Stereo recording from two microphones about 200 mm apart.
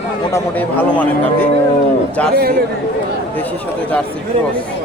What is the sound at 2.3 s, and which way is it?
Speech, 50° right (ahead or behind).